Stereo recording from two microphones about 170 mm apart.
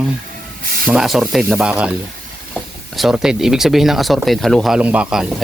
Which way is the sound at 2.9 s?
5° right (ahead or behind).